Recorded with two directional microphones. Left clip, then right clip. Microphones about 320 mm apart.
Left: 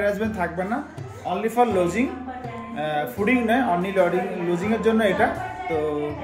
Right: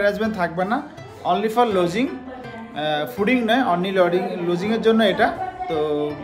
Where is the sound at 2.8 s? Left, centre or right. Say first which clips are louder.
Right 2 dB; centre.